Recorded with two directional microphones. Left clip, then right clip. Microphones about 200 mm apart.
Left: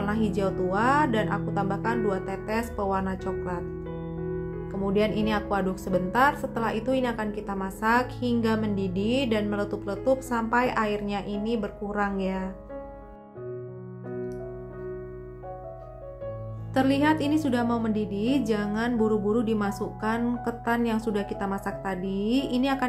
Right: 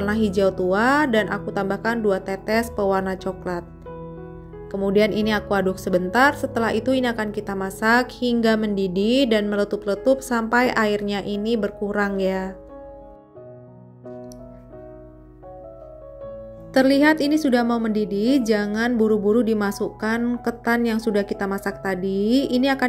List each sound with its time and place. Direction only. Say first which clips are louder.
0.0 s a woman's voice: right 7 dB; 25° right (ahead or behind)
4.8 s a woman's voice: right 6 dB; 25° right (ahead or behind)
16.7 s a woman's voice: right 7 dB; 25° right (ahead or behind)